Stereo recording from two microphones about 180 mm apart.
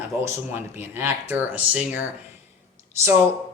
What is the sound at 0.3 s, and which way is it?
Speech, 10° right (ahead or behind).